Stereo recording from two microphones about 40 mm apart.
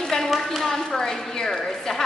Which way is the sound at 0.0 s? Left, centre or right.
Centre.